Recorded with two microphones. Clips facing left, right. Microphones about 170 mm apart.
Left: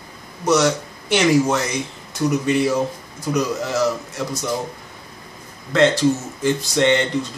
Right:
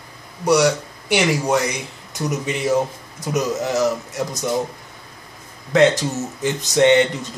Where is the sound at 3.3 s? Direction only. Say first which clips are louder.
Right 1 dB; 20° right (ahead or behind).